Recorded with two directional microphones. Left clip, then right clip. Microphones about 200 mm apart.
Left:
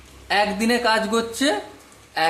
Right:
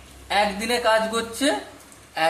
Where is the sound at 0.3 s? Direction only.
45° left (ahead or behind).